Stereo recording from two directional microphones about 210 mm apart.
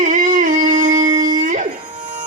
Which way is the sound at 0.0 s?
35° right (ahead or behind).